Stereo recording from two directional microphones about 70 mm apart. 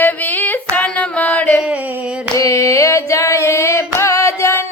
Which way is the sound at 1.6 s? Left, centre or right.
Centre.